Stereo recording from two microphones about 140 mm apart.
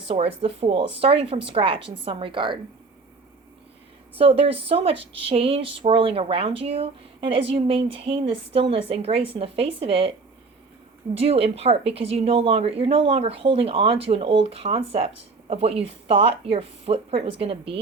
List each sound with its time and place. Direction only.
0.1 s a woman's voice: 45° right (ahead or behind)
4.2 s speech: 40° right (ahead or behind)
11.2 s speech: 45° right (ahead or behind)